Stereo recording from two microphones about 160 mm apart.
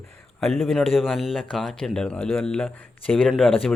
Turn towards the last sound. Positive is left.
turn(degrees=0)  # may be behind; listen again after turning